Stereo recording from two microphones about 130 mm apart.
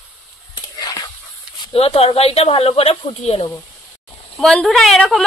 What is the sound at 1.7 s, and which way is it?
Speech, 45° left (ahead or behind).